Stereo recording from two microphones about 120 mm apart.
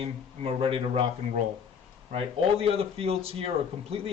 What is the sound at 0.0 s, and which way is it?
Speech, 50° right (ahead or behind).